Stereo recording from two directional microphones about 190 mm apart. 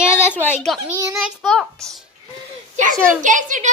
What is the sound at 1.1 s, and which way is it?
Child singing, centre (ahead or behind).